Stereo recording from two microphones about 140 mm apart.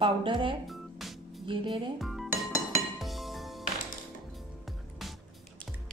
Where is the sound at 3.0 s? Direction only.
Centre (ahead or behind).